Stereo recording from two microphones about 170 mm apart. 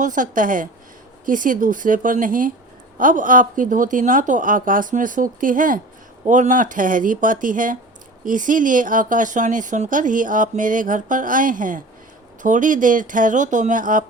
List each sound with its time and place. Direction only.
0.0 s speech: 50° right (ahead or behind)